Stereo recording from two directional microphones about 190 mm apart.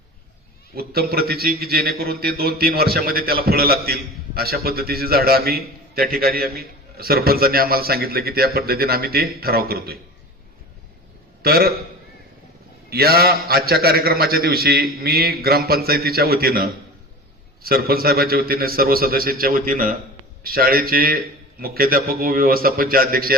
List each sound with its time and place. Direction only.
0.8 s a man's voice: 55° right (ahead or behind)
11.4 s a man's voice: 55° right (ahead or behind)
12.9 s a man's voice: 55° right (ahead or behind)